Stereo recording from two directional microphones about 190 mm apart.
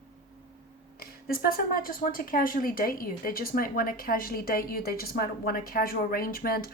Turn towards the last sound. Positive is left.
turn(degrees=50)  # may be behind; listen again after turning